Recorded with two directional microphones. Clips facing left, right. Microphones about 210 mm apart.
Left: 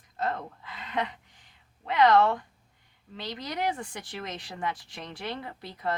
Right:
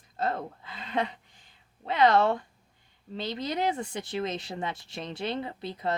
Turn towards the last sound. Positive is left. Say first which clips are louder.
# right 2 dB
turn(degrees=-25)  # may be behind; listen again after turning